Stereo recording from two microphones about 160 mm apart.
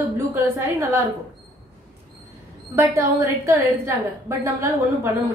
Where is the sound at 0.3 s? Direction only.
15° right (ahead or behind).